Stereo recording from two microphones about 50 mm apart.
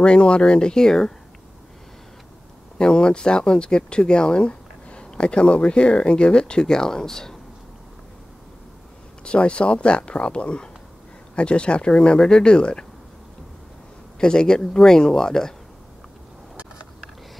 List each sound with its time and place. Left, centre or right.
0.0 s speech: centre
2.8 s speech: centre
9.2 s speech: left
14.2 s speech: centre